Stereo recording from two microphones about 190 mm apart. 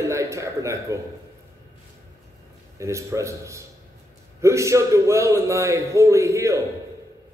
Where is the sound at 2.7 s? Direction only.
15° right (ahead or behind).